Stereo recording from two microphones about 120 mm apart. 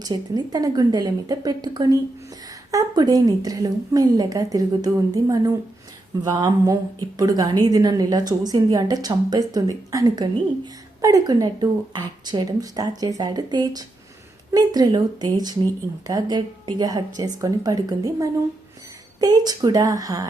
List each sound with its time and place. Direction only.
0.0 s a woman's voice: 35° right (ahead or behind)